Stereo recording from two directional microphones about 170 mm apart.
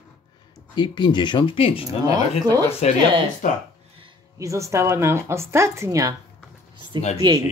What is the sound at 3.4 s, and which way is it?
Speech, 50° left (ahead or behind).